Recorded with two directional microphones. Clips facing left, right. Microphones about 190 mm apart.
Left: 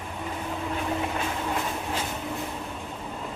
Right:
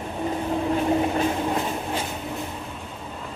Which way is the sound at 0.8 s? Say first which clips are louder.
Right 7 dB; 35° right (ahead or behind).